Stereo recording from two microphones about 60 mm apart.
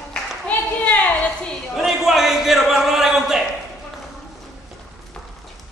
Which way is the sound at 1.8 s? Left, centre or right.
Centre.